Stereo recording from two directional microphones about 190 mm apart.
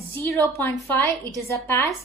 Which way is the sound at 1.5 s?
15° left (ahead or behind).